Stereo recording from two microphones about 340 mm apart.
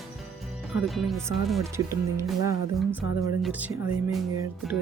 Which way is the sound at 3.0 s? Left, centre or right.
Left.